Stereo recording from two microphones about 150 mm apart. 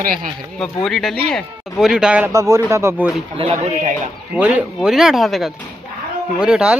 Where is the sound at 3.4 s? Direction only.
40° right (ahead or behind).